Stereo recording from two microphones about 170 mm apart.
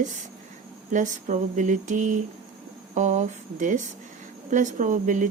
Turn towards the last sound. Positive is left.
turn(degrees=-50)  # may be behind; listen again after turning